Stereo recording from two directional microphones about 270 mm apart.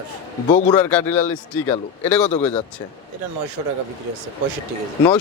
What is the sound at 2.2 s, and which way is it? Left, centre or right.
Speech, left.